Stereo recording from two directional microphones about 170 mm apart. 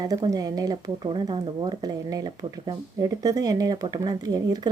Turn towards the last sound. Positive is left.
turn(degrees=-25)  # may be behind; listen again after turning